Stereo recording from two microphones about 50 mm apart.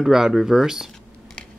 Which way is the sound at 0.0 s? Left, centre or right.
Centre.